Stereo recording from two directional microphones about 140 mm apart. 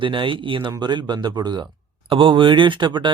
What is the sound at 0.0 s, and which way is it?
Speech, 35° right (ahead or behind).